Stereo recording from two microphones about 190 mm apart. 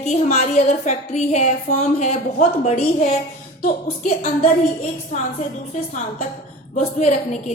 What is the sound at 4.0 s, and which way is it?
Speech, 40° left (ahead or behind).